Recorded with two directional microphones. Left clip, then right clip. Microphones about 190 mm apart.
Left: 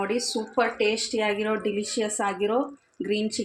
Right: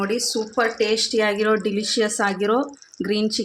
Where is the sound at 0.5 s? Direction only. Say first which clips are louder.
Right 3 dB; 25° right (ahead or behind).